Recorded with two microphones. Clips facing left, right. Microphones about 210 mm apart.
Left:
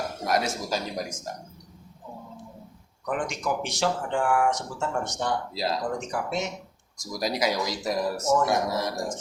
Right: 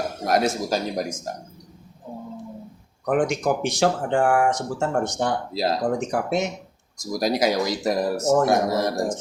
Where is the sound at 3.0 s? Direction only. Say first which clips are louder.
Right 8 dB; 55° right (ahead or behind).